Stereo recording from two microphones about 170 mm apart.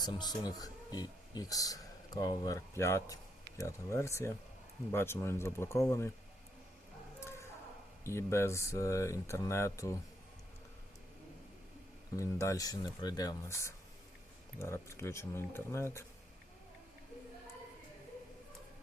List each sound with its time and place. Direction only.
0.0 s speech: 25° left (ahead or behind)
7.2 s a sound: 15° left (ahead or behind)
8.0 s speech: 15° left (ahead or behind)
12.1 s speech: 15° left (ahead or behind)